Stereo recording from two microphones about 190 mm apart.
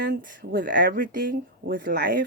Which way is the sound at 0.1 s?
45° right (ahead or behind).